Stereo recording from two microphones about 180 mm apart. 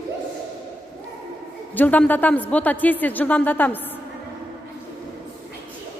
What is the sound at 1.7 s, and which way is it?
A woman's voice, 10° left (ahead or behind).